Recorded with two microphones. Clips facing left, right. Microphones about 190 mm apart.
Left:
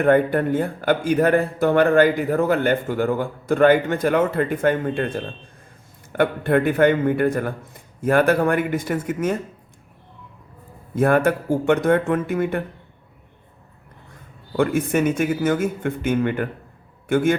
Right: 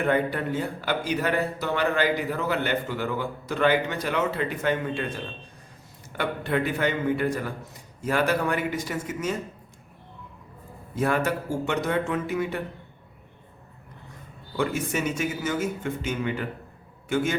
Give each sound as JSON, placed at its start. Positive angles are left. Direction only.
{"t": 0.0, "sound": "speech", "side_deg": 50}
{"t": 10.9, "sound": "speech", "side_deg": 55}
{"t": 14.5, "sound": "speech", "side_deg": 55}